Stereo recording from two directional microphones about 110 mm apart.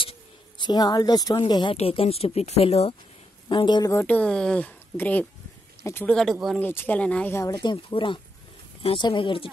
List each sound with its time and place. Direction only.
0.0 s a sound: 50° left (ahead or behind)
1.5 s speech: 45° left (ahead or behind)
1.8 s speech: 65° left (ahead or behind)
3.4 s speech: 45° left (ahead or behind)
4.0 s speech: 10° left (ahead or behind)
6.0 s speech: 5° left (ahead or behind)
6.6 s speech: 20° left (ahead or behind)
7.5 s speech: 45° left (ahead or behind)